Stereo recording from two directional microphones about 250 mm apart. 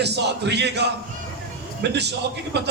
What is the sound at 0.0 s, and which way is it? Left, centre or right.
A man's voice, right.